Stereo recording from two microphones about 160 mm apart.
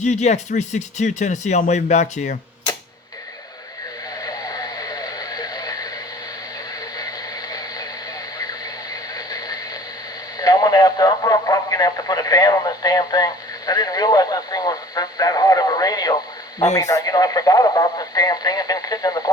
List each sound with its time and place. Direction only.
0.0 s speech: 45° left (ahead or behind)
4.2 s radio: 25° left (ahead or behind)
6.9 s a sound: 25° left (ahead or behind)
10.3 s radio: 25° left (ahead or behind)